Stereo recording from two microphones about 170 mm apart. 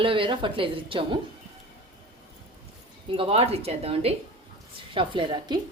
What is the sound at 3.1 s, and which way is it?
A woman's voice, 35° right (ahead or behind).